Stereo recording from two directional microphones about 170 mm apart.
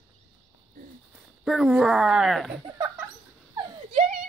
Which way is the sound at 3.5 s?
25° right (ahead or behind).